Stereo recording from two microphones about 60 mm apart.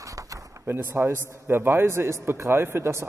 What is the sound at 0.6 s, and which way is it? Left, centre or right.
A man's voice, right.